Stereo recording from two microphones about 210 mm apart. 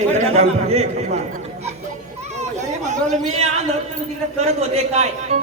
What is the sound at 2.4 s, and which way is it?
Chatter, 35° right (ahead or behind).